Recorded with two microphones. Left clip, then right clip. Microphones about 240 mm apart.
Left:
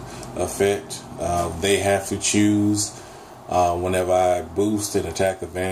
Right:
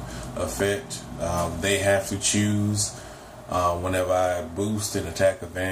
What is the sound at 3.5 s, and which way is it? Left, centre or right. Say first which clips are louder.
Speech: left 4 dB; left.